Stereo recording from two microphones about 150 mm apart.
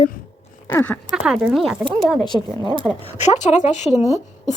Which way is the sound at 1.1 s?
5° right (ahead or behind).